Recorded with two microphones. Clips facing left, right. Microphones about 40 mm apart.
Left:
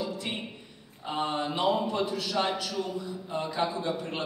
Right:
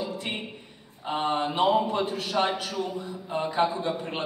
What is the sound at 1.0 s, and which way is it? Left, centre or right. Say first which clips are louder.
A man's voice: right 3 dB; right.